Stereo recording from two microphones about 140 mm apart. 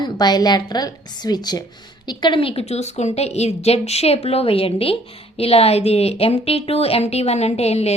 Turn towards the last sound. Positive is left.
turn(degrees=50)  # may be behind; listen again after turning